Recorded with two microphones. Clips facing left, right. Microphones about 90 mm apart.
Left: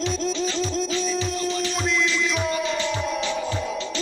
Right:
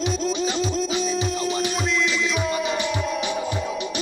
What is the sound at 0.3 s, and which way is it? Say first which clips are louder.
Music: right 1 dB; 15° right (ahead or behind).